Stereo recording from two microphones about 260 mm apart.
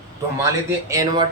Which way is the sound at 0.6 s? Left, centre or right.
Centre.